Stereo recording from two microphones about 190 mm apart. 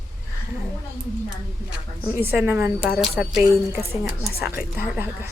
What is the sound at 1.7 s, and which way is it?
Speech, 10° right (ahead or behind).